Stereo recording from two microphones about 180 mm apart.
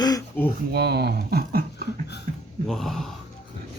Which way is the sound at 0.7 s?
65° right (ahead or behind).